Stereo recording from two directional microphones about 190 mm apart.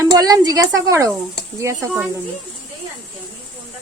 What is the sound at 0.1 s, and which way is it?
Speech, 20° right (ahead or behind).